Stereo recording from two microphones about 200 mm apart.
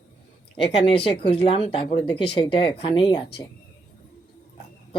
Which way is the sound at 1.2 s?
25° left (ahead or behind).